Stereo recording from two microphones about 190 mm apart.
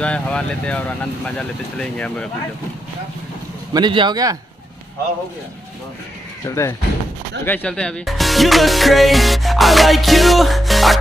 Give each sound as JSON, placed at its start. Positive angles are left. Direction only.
{"t": 0.0, "sound": "speech", "side_deg": 5}
{"t": 3.7, "sound": "speech", "side_deg": -25}
{"t": 6.4, "sound": "speech", "side_deg": 15}